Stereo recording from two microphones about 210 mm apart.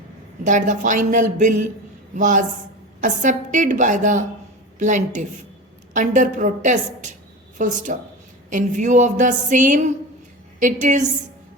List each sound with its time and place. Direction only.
0.4 s a woman's voice: 35° right (ahead or behind)